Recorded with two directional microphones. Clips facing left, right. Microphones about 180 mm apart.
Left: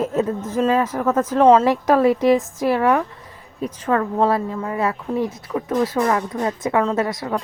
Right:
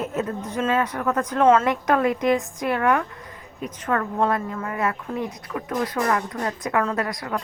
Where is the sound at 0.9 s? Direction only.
25° left (ahead or behind).